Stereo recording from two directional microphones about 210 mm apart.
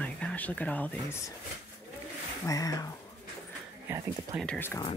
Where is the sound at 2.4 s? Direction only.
15° left (ahead or behind).